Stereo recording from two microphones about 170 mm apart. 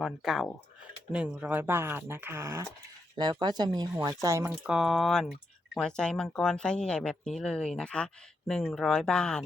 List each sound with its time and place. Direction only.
0.0 s speech: centre (ahead or behind); by 4.5 s 15° right (ahead or behind)
4.6 s speech: 5° right (ahead or behind)